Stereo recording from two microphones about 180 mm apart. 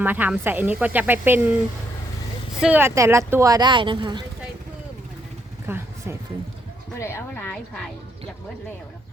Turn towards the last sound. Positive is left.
turn(degrees=5)  # may be behind; listen again after turning